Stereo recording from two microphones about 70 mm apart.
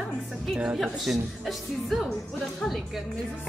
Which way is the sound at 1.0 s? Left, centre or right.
Centre.